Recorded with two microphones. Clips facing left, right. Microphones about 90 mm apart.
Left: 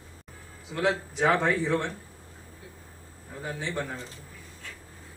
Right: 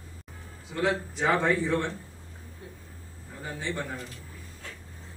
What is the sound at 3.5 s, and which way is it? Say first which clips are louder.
Speech: even; 15° left (ahead or behind).